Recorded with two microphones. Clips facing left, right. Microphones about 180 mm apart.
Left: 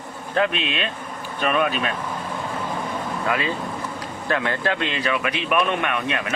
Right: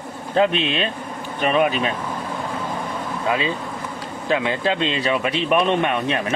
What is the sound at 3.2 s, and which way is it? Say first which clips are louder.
Speech: right 3 dB; 20° right (ahead or behind).